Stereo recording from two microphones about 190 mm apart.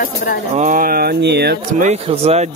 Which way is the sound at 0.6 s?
45° right (ahead or behind).